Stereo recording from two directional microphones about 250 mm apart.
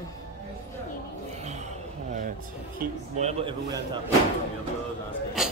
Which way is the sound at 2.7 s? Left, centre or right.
Right.